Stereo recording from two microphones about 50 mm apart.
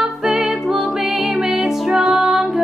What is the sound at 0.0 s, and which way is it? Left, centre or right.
Music, centre.